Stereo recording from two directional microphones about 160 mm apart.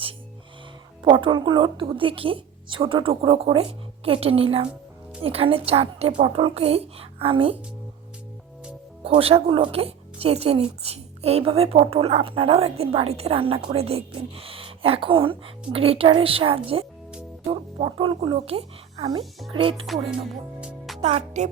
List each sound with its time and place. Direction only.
1.0 s a woman's voice: 30° right (ahead or behind)
9.0 s a woman's voice: 35° right (ahead or behind)
20.6 s music: 5° right (ahead or behind)
21.0 s speech: 40° right (ahead or behind)